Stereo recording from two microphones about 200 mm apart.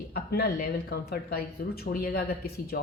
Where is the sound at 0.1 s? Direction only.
50° left (ahead or behind).